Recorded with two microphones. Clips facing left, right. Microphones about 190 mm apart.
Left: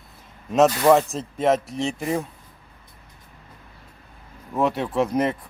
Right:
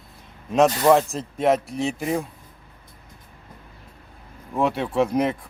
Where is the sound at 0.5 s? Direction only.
Centre (ahead or behind).